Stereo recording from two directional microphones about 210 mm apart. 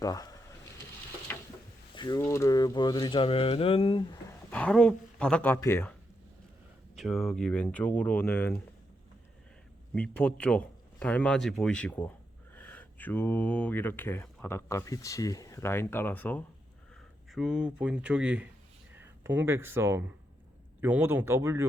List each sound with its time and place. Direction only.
0.0 s speech: 15° left (ahead or behind)
1.3 s a sound: 10° left (ahead or behind)
2.0 s speech: 15° left (ahead or behind)
4.3 s speech: 5° left (ahead or behind)
9.9 s speech: 5° left (ahead or behind)
17.3 s speech: 5° right (ahead or behind)